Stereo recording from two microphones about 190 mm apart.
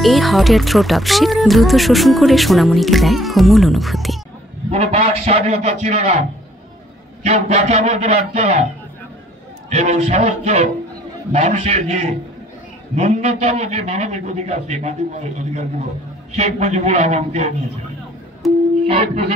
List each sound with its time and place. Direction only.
0.0 s speech: centre (ahead or behind)
4.6 s a man's voice: 35° right (ahead or behind)
7.2 s a man's voice: 35° right (ahead or behind)
9.7 s a man's voice: 35° right (ahead or behind)
18.4 s a sound: centre (ahead or behind)